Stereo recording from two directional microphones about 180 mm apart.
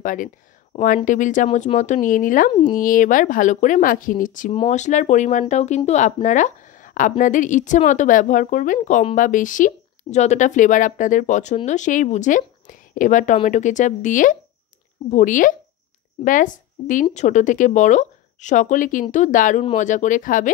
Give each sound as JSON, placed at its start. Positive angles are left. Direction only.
{"t": 0.0, "sound": "speech", "side_deg": 45}